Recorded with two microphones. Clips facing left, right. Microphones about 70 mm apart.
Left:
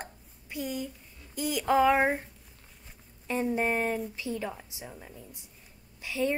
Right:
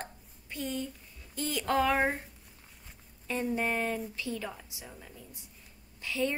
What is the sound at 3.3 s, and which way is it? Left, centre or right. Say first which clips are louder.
A woman's voice: left 3 dB; centre.